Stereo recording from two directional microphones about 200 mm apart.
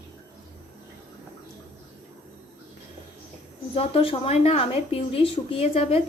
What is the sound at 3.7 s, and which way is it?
Speech, 25° left (ahead or behind).